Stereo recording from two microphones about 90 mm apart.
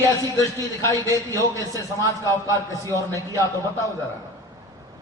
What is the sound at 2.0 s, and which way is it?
Speech, 40° right (ahead or behind).